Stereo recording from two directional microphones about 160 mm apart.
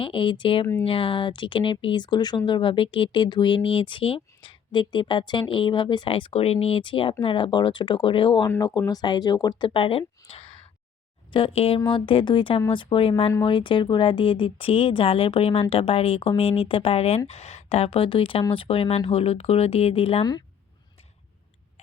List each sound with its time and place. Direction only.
0.0 s speech: 30° left (ahead or behind)
8.4 s speech: 20° left (ahead or behind)
10.2 s a sound: 35° left (ahead or behind)
11.3 s speech: 35° left (ahead or behind)